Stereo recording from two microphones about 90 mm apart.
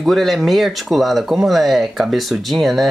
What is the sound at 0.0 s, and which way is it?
Speech, centre (ahead or behind).